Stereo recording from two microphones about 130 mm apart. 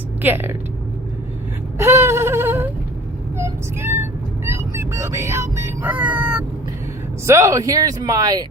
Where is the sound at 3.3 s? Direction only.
20° right (ahead or behind).